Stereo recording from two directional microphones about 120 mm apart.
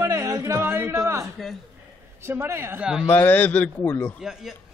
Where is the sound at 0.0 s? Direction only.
25° right (ahead or behind).